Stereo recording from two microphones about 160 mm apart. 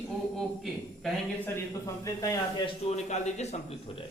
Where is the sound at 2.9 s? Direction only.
45° left (ahead or behind).